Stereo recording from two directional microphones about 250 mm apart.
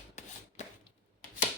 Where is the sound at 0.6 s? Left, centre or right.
Left.